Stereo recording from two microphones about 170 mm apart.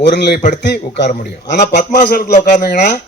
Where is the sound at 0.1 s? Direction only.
75° left (ahead or behind).